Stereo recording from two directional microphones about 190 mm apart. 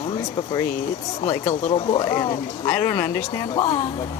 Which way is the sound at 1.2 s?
25° left (ahead or behind).